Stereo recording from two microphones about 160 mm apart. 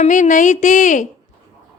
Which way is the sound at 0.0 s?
50° left (ahead or behind).